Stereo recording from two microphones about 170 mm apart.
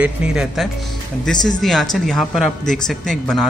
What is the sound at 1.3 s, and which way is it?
Speech, 5° left (ahead or behind).